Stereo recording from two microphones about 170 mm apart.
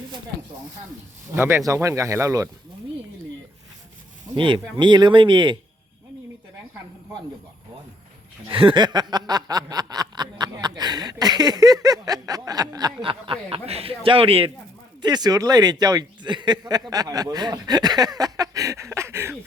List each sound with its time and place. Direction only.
1.4 s speech: 15° right (ahead or behind)
4.4 s snicker: 30° right (ahead or behind)
8.4 s snicker: 30° right (ahead or behind)